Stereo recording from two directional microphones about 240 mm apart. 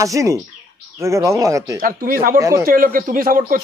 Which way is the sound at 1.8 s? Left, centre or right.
Right.